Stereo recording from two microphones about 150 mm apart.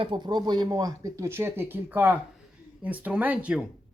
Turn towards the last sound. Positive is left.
turn(degrees=-10)  # may be behind; listen again after turning